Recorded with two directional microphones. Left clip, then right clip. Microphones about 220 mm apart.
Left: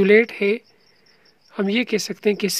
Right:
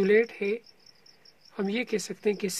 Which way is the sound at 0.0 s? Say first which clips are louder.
Left 8 dB; 30° left (ahead or behind).